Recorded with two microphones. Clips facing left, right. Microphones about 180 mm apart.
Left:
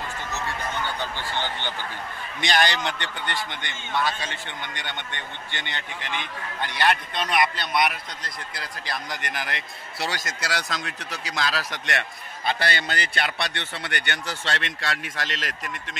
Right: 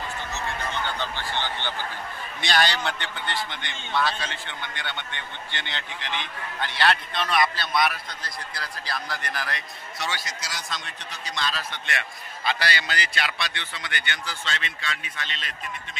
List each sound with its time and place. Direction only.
2.4 s a man's voice: 15° left (ahead or behind)
5.5 s a man's voice: 10° left (ahead or behind)
9.9 s a man's voice: 40° left (ahead or behind)
10.4 s a man's voice: 70° left (ahead or behind)
12.4 s a man's voice: 50° left (ahead or behind); by 16.0 s 90° left